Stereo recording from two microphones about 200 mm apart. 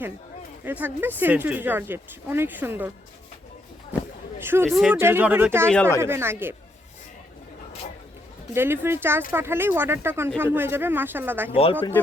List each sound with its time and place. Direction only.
0.6 s speech: 10° right (ahead or behind)
3.9 s a sound: 5° right (ahead or behind)
4.4 s speech: 10° right (ahead or behind)
5.6 s speech: 5° left (ahead or behind)
6.0 s speech: 10° right (ahead or behind)
8.5 s speech: 10° right (ahead or behind)